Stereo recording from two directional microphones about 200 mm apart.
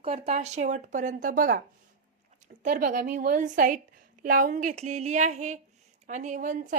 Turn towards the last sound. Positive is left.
turn(degrees=-40)  # may be behind; listen again after turning